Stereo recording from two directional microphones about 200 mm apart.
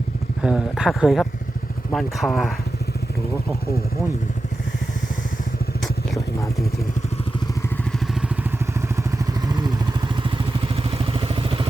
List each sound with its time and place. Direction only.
0.4 s speech: 5° right (ahead or behind)
10.9 s vehicle: 25° right (ahead or behind)